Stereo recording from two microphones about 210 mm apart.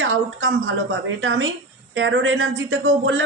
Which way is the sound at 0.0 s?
60° right (ahead or behind).